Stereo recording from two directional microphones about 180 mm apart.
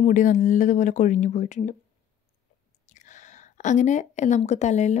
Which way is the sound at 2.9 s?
40° left (ahead or behind).